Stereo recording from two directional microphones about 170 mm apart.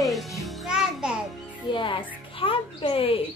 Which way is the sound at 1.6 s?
30° left (ahead or behind).